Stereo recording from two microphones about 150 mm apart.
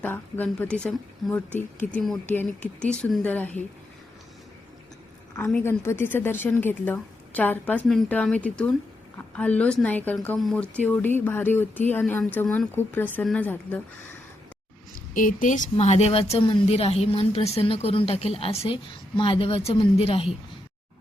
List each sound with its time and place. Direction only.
0.0 s a woman's voice: 10° left (ahead or behind)
5.6 s a woman's voice: 15° left (ahead or behind)
14.9 s a woman's voice: 60° left (ahead or behind); by 20.3 s 40° left (ahead or behind)